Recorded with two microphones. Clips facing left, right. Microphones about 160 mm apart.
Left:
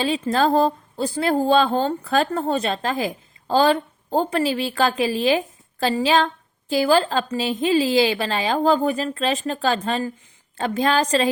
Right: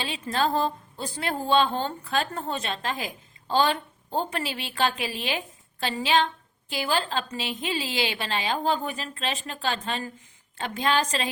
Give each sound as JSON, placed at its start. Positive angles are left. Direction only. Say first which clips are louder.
{"t": 0.0, "sound": "speech", "louder": "left 7 dB", "side_deg": 40}